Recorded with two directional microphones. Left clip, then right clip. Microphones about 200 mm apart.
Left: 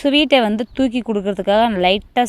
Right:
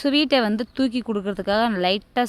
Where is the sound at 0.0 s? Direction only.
5° left (ahead or behind).